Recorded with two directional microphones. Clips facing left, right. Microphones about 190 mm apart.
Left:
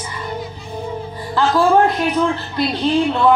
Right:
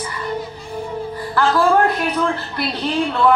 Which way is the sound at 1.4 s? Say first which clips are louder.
Left 2 dB; 15° left (ahead or behind).